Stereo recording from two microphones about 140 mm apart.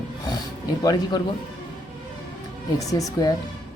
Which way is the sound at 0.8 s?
30° left (ahead or behind).